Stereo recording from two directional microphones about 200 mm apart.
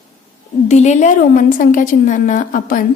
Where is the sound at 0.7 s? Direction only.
35° left (ahead or behind).